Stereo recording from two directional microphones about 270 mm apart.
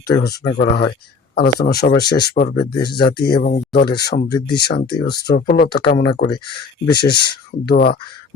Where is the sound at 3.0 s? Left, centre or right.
Left.